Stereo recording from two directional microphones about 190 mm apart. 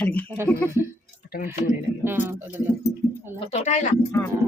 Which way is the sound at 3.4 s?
35° left (ahead or behind).